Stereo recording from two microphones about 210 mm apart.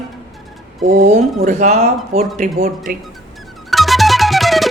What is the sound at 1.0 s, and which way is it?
Speech, 30° right (ahead or behind).